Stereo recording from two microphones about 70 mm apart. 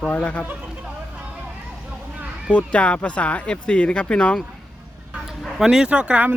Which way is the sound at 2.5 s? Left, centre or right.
Centre.